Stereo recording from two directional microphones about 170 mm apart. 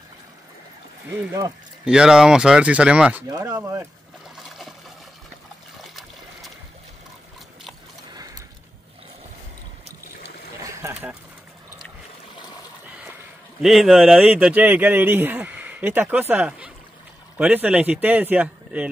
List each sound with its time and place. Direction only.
1.9 s speech: 5° right (ahead or behind)
3.3 s speech: 20° right (ahead or behind)
4.5 s trickle: centre (ahead or behind)
8.1 s a sound: 20° right (ahead or behind)
10.6 s boat: 15° right (ahead or behind)
13.6 s speech: centre (ahead or behind)